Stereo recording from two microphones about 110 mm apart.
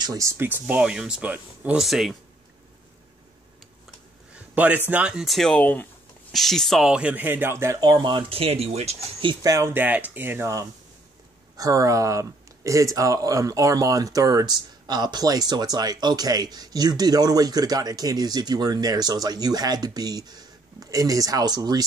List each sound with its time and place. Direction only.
0.0 s speech: 30° right (ahead or behind); by 1.8 s 15° right (ahead or behind)
1.8 s speech: centre (ahead or behind)
4.6 s speech: 15° right (ahead or behind); by 6.9 s 5° left (ahead or behind)
6.9 s speech: 10° right (ahead or behind)
7.8 s speech: 40° right (ahead or behind); by 8.9 s 70° right (ahead or behind)
9.4 s speech: 30° right (ahead or behind)